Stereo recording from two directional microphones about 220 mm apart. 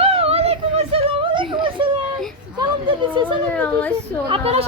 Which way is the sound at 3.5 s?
5° left (ahead or behind).